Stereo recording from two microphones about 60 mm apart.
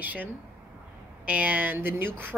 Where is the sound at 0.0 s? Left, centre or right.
Right.